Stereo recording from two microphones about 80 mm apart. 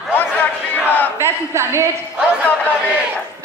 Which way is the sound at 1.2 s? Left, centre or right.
Right.